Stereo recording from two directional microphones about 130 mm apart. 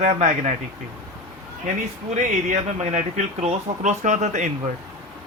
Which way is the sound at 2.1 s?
60° right (ahead or behind).